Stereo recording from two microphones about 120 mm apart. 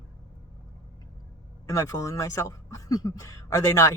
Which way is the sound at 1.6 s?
25° left (ahead or behind).